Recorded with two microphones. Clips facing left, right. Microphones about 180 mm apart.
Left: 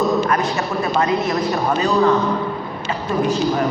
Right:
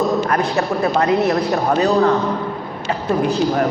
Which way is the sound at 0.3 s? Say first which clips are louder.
Right 2 dB; 60° right (ahead or behind).